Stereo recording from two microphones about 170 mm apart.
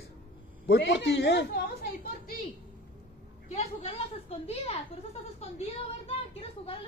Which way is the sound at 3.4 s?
35° left (ahead or behind).